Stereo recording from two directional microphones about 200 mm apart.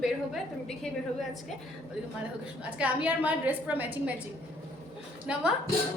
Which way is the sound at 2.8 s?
5° right (ahead or behind).